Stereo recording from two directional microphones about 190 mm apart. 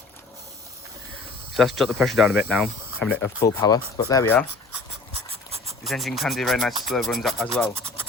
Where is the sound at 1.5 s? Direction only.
Centre (ahead or behind); by 4.3 s 20° left (ahead or behind).